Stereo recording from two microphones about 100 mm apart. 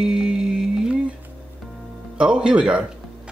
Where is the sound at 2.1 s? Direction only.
10° right (ahead or behind).